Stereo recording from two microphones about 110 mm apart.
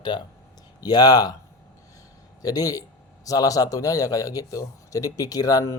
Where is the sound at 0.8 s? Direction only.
35° left (ahead or behind).